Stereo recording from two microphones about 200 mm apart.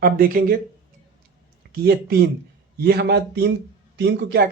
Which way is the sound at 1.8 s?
50° right (ahead or behind).